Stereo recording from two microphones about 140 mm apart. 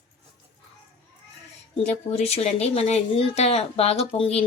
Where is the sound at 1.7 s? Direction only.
50° left (ahead or behind).